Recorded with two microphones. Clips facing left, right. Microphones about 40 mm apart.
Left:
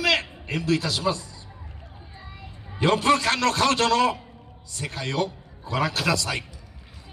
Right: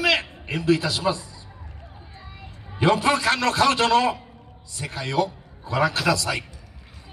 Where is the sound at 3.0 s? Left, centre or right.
Right.